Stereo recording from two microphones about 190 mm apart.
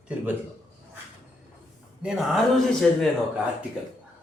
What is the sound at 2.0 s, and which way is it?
Speech, 5° right (ahead or behind).